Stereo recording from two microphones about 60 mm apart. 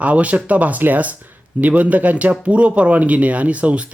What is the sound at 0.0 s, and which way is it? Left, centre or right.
Speech, right.